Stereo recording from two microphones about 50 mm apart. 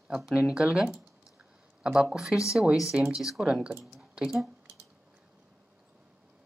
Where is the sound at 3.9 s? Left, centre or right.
Centre.